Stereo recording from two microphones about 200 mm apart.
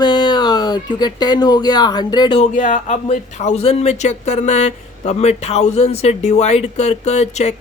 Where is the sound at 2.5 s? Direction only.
40° left (ahead or behind).